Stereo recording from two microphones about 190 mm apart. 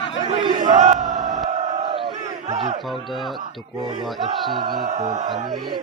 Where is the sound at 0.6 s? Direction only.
40° right (ahead or behind).